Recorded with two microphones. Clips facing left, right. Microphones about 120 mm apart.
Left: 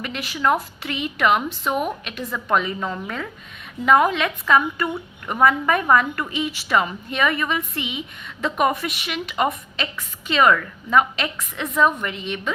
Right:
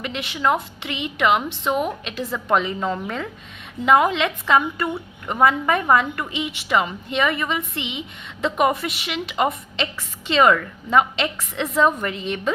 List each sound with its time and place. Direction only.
0.0 s a woman's voice: 25° right (ahead or behind)